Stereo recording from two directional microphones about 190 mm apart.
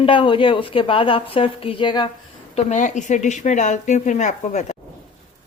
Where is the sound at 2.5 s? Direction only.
40° left (ahead or behind).